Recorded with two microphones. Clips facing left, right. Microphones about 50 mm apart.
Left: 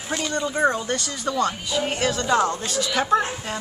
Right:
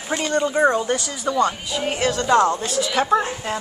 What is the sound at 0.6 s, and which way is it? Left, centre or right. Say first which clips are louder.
A woman's voice: right 2 dB; centre.